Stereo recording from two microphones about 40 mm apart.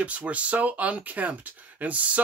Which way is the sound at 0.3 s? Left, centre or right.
Right.